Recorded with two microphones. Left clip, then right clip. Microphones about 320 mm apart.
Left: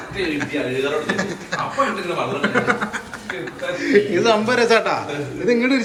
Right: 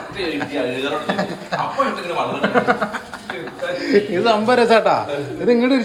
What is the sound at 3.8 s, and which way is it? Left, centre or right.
A man's voice, centre.